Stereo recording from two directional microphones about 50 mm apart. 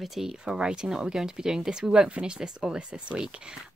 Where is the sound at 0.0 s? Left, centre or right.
Centre.